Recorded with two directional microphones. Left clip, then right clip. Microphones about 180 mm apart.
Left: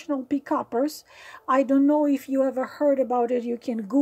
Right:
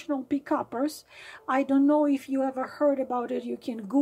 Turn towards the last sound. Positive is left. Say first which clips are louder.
# left 3 dB
turn(degrees=30)  # may be behind; listen again after turning